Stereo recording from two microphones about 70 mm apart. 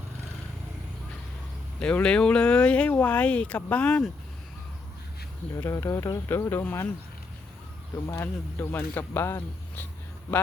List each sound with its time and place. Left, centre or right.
1.8 s speech: centre
5.6 s speech: left
8.2 s speech: left